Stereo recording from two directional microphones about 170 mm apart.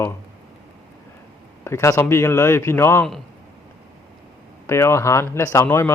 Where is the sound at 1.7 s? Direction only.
15° left (ahead or behind).